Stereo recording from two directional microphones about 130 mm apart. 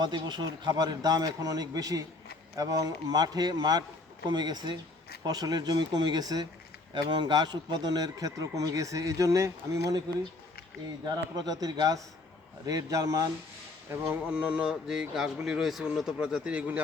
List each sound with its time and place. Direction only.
0.0 s a man's voice: 35° right (ahead or behind)
11.0 s speech: 30° right (ahead or behind)
14.3 s speech: 5° right (ahead or behind)